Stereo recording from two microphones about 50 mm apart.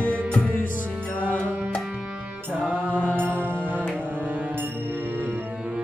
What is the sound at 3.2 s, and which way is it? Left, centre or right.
Music, right.